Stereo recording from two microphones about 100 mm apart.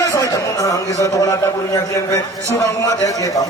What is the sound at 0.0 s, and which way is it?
A man's voice, 35° left (ahead or behind).